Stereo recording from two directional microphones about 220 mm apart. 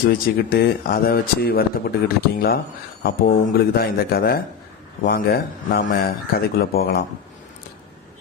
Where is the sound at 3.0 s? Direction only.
45° left (ahead or behind).